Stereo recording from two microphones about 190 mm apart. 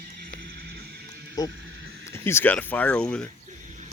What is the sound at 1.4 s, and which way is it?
Speech, 20° left (ahead or behind).